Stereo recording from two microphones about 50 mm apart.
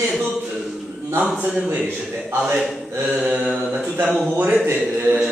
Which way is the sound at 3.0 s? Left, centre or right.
Right.